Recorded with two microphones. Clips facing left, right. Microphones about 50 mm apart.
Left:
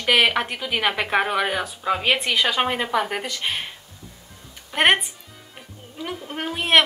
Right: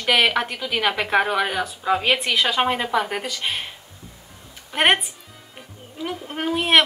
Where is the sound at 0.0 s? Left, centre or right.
Centre.